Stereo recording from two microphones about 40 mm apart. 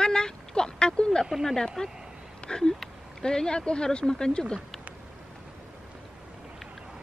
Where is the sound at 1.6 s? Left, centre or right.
Centre.